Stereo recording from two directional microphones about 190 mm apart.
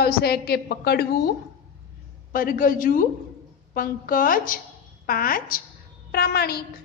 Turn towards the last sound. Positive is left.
turn(degrees=55)  # may be behind; listen again after turning